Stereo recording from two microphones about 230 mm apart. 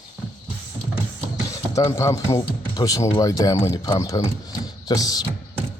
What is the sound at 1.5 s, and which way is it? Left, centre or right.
Speech, centre.